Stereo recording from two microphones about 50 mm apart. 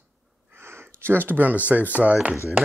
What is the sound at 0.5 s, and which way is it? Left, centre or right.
Speech, right.